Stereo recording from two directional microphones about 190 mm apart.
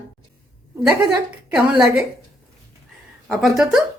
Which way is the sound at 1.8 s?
5° right (ahead or behind).